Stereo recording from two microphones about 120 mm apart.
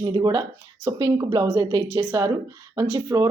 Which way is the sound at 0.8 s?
25° right (ahead or behind).